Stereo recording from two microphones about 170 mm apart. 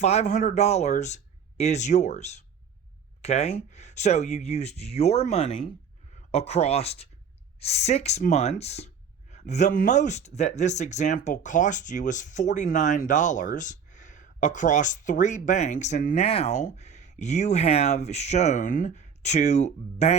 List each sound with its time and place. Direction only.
0.0 s speech: 40° left (ahead or behind)